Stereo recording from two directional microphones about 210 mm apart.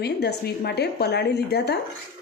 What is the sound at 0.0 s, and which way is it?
Speech, 50° left (ahead or behind).